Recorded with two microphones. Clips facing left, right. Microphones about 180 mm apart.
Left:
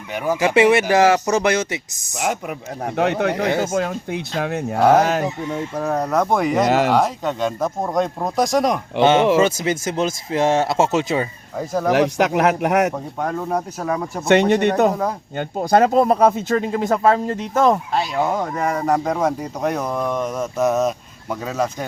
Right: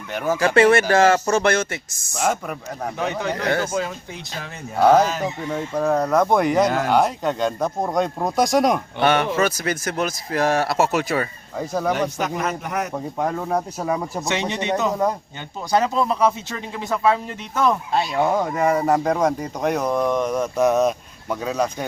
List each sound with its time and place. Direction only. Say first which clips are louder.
0.1 s speech: left 1 dB; 15° left (ahead or behind)
2.9 s speech: left 7 dB; 70° left (ahead or behind)
3.7 s speech: left 4 dB; 50° left (ahead or behind)
5.5 s speech: right 2 dB; 5° left (ahead or behind)
6.7 s speech: left 5 dB; 80° left
6.9 s speech: even; centre (ahead or behind)
9.0 s speech: left 7 dB; 20° left (ahead or behind)
11.5 s speech: left 2 dB; centre (ahead or behind)
11.9 s speech: left 8 dB; 85° left
13.1 s speech: right 3 dB; 5° right (ahead or behind)
14.3 s speech: left 10 dB; 60° left (ahead or behind); by 17.7 s 40° left (ahead or behind)
17.9 s speech: right 1 dB; centre (ahead or behind)